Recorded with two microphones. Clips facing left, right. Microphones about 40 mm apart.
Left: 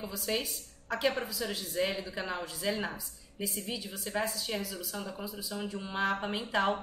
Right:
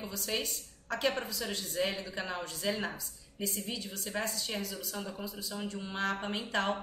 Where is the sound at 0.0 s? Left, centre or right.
Centre.